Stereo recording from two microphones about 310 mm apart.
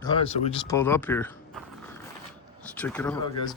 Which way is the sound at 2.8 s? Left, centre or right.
Centre.